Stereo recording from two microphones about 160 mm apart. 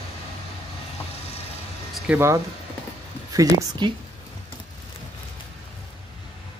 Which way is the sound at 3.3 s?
20° right (ahead or behind).